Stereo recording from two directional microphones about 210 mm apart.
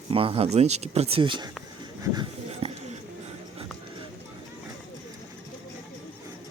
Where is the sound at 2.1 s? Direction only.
25° right (ahead or behind).